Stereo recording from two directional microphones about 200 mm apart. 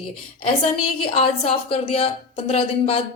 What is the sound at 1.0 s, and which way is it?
A woman's voice, 25° left (ahead or behind).